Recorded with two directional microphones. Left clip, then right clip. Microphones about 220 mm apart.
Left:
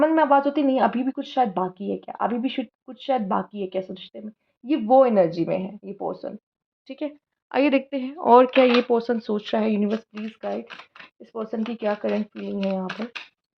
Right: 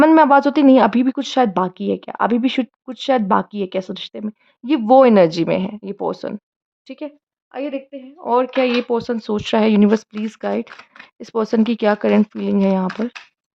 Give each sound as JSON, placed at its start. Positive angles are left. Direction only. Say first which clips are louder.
{"t": 0.0, "sound": "speech", "louder": "right 7 dB", "side_deg": -40}
{"t": 6.8, "sound": "speech", "louder": "right 1 dB", "side_deg": -15}
{"t": 7.5, "sound": "a woman's voice", "louder": "left 5 dB", "side_deg": 20}
{"t": 8.3, "sound": "speech", "louder": "left 2 dB", "side_deg": 0}
{"t": 9.4, "sound": "speech", "louder": "right 8 dB", "side_deg": -25}
{"t": 11.3, "sound": "speech", "louder": "right 11 dB", "side_deg": -40}